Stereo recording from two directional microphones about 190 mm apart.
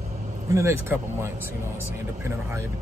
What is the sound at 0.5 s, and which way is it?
Speech, 15° right (ahead or behind).